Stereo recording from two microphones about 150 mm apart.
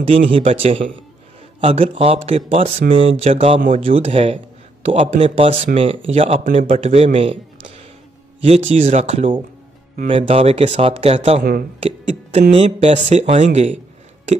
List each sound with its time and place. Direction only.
0.0 s a man's voice: 40° right (ahead or behind)